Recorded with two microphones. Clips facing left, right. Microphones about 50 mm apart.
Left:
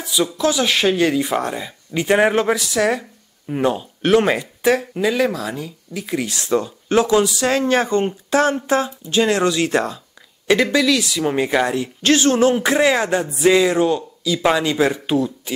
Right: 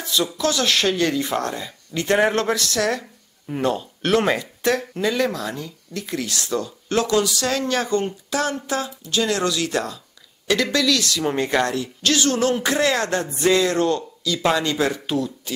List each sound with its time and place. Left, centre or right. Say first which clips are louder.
0.0 s speech: left 3 dB; centre
11.8 s speech: left 5 dB; left